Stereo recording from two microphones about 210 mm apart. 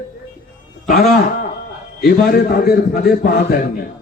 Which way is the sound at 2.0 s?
45° left (ahead or behind).